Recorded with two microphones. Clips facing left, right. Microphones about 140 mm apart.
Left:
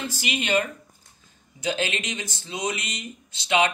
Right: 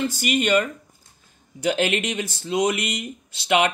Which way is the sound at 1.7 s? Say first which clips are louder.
Right 5 dB; 55° right (ahead or behind).